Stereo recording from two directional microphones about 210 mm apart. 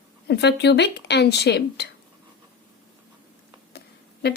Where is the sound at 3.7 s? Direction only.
50° left (ahead or behind).